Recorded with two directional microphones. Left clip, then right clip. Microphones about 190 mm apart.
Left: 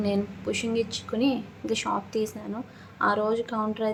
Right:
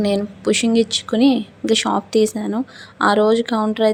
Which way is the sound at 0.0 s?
40° right (ahead or behind).